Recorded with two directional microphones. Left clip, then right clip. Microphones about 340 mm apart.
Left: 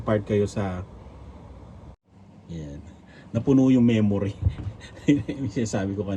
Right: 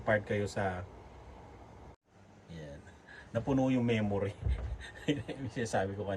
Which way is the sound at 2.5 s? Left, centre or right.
Centre.